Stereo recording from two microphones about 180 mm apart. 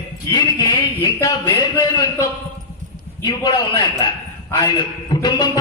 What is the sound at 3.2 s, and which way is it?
Speech, 25° left (ahead or behind).